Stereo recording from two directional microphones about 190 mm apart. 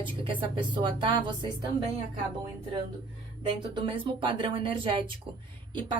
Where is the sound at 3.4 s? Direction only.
25° right (ahead or behind).